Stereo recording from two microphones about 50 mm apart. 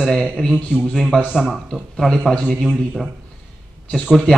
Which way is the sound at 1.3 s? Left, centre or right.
Centre.